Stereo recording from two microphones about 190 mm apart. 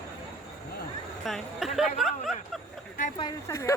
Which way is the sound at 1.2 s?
Centre (ahead or behind).